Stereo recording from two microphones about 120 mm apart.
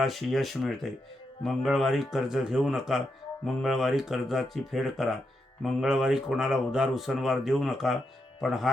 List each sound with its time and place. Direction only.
0.0 s speech: centre (ahead or behind)